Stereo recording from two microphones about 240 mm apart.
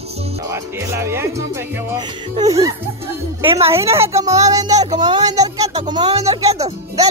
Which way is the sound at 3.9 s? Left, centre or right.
Centre.